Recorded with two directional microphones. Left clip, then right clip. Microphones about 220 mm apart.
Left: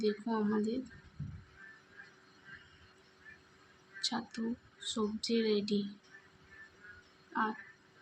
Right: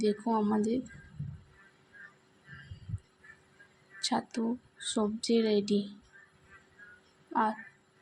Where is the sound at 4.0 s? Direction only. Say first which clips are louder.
Right 5 dB; 30° right (ahead or behind).